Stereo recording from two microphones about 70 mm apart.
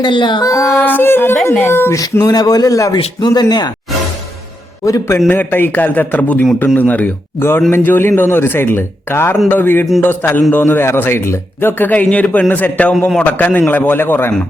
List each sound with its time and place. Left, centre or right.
0.0 s a sound: left
0.4 s singing: left
0.8 s yodeling: left
1.5 s a man's voice: left
2.0 s speech: left
2.9 s speech: left
5.3 s a man's voice: left
7.3 s a man's voice: left
11.9 s a man's voice: left